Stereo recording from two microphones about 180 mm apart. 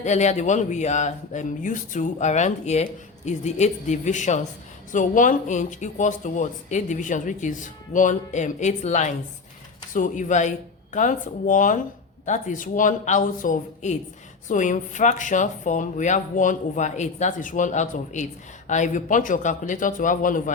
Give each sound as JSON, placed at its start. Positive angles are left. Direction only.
{"t": 0.0, "sound": "speech", "side_deg": 40}